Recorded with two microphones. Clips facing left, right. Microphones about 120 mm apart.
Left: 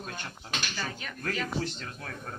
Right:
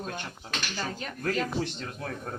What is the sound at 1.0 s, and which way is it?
Speech, 30° right (ahead or behind).